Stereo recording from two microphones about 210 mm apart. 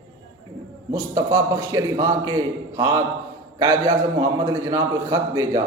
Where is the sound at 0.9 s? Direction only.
15° right (ahead or behind).